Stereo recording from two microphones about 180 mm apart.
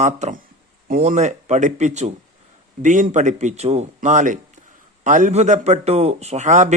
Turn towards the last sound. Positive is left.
turn(degrees=-45)  # may be behind; listen again after turning